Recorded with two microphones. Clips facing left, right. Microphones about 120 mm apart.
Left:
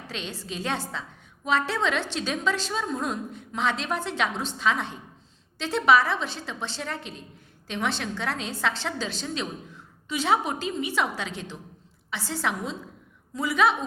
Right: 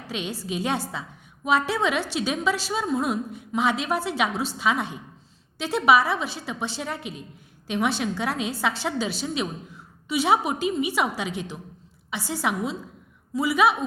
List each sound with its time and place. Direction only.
0.1 s a woman's voice: 10° right (ahead or behind)